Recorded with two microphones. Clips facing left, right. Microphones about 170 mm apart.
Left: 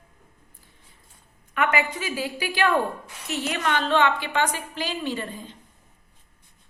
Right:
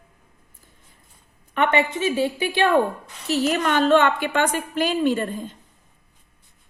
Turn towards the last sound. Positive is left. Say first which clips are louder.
# right 7 dB
turn(degrees=-50)  # may be behind; listen again after turning